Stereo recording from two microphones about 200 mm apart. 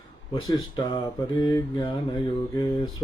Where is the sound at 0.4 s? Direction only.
20° left (ahead or behind).